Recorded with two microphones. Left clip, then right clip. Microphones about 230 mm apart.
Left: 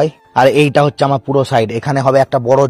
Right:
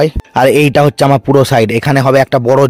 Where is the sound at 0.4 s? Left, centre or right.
Right.